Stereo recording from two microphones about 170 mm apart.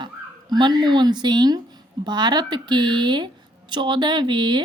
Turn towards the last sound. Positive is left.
turn(degrees=-25)  # may be behind; listen again after turning